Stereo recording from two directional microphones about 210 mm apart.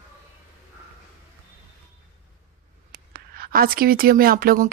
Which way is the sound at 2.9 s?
45° right (ahead or behind).